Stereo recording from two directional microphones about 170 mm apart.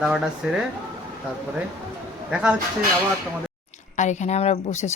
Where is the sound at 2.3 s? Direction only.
5° right (ahead or behind).